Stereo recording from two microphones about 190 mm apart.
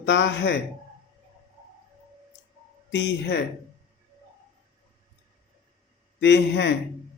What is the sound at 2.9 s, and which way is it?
Speech, 65° left (ahead or behind).